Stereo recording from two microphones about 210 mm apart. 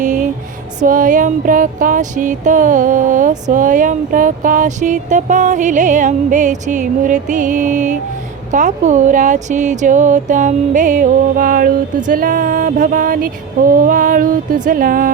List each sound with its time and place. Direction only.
0.0 s music: 35° right (ahead or behind)
0.8 s speech: 40° right (ahead or behind)